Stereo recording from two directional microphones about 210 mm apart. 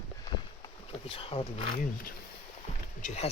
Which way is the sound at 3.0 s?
30° left (ahead or behind).